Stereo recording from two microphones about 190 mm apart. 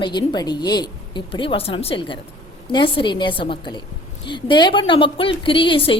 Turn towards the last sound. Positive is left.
turn(degrees=25)  # may be behind; listen again after turning